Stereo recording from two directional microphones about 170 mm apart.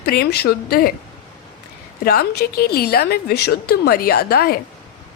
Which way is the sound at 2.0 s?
65° left (ahead or behind).